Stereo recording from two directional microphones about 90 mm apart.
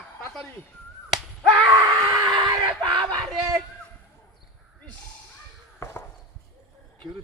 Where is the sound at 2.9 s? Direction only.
Centre (ahead or behind).